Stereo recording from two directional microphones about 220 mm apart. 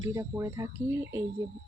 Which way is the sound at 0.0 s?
15° right (ahead or behind).